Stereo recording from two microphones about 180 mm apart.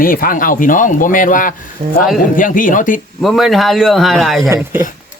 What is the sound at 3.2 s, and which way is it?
Speech, centre (ahead or behind).